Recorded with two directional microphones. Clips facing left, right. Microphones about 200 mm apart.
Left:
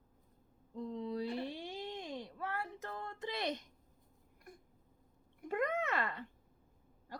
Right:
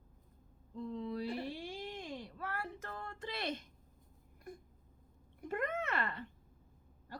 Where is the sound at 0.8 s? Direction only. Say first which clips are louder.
Left 1 dB; 20° left (ahead or behind).